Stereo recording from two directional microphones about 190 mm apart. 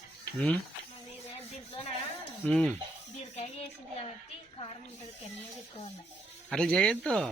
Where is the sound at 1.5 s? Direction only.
30° left (ahead or behind).